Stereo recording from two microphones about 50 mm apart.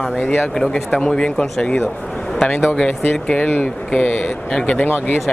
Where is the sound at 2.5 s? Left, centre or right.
Left.